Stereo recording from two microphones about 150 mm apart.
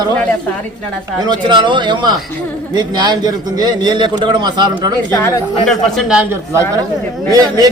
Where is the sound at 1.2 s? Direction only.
30° right (ahead or behind).